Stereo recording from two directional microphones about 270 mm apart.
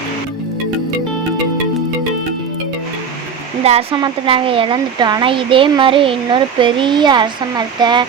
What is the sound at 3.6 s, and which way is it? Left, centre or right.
Speech, right.